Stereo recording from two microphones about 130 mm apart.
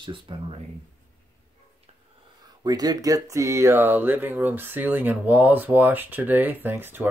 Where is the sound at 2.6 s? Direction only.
30° right (ahead or behind).